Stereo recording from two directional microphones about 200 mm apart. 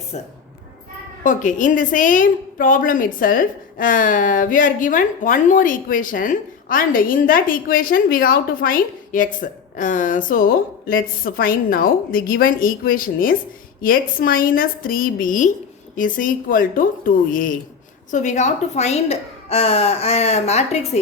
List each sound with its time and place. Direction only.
1.2 s a woman's voice: 40° left (ahead or behind)